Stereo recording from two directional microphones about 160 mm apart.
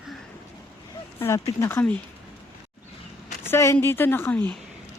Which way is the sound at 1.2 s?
15° left (ahead or behind).